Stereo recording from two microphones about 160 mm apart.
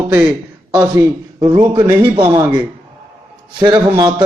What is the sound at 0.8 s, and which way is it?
Speech, 25° right (ahead or behind).